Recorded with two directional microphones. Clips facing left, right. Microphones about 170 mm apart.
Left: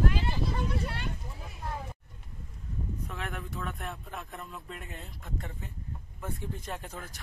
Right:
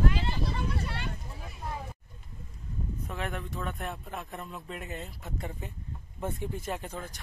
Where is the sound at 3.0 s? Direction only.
Centre (ahead or behind).